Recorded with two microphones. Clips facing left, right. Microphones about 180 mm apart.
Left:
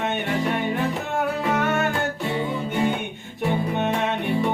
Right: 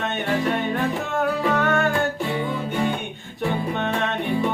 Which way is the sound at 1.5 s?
15° left (ahead or behind).